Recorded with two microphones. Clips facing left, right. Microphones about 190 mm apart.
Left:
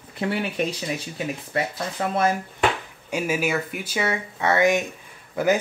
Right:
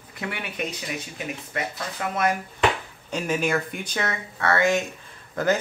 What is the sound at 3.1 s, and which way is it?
Speech, 5° left (ahead or behind).